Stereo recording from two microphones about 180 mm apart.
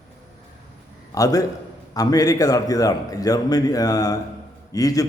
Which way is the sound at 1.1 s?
20° left (ahead or behind).